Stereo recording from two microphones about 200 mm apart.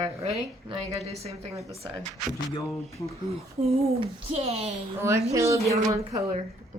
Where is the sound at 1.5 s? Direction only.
15° right (ahead or behind).